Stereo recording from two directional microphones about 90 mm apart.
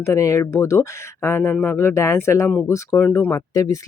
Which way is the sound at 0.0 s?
35° left (ahead or behind).